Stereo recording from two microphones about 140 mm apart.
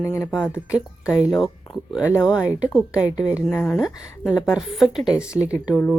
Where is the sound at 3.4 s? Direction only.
10° left (ahead or behind).